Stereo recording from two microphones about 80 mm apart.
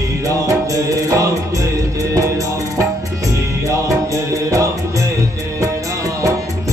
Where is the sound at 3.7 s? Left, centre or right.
Right.